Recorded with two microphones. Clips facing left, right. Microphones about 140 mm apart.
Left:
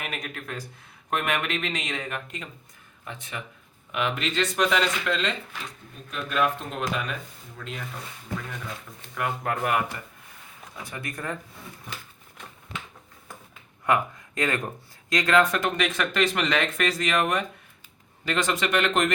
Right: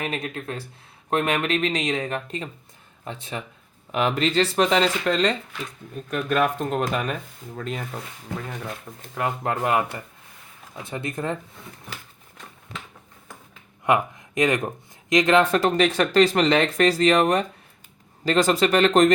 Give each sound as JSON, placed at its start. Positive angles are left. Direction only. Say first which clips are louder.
{"t": 0.0, "sound": "speech", "louder": "right 6 dB", "side_deg": -30}
{"t": 6.1, "sound": "speech", "louder": "right 4 dB", "side_deg": -50}
{"t": 9.1, "sound": "speech", "louder": "right 3 dB", "side_deg": -25}
{"t": 10.8, "sound": "speech", "louder": "right 6 dB", "side_deg": -25}
{"t": 13.8, "sound": "speech", "louder": "right 3 dB", "side_deg": -20}